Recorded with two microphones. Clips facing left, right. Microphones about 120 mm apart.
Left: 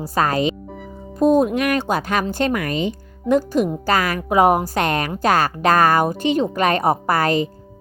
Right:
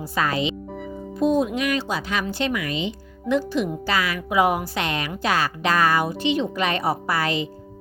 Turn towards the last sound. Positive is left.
turn(degrees=45)  # may be behind; listen again after turning